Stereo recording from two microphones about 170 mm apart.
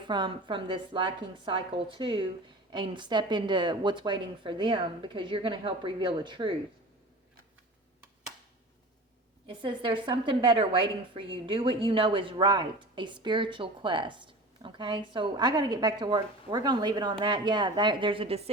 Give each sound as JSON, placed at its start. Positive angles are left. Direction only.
{"t": 0.0, "sound": "a woman's voice", "side_deg": -25}
{"t": 9.5, "sound": "a woman's voice", "side_deg": -30}